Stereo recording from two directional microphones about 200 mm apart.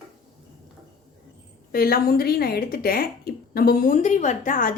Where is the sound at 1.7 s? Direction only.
50° left (ahead or behind).